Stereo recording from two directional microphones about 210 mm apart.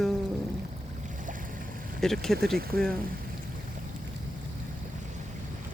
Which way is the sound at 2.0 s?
Centre (ahead or behind).